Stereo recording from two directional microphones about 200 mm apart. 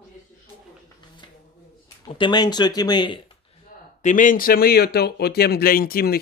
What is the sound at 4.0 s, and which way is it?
Speech, 40° left (ahead or behind).